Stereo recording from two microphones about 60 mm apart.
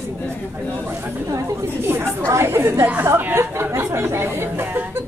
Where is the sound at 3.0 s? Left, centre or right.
Right.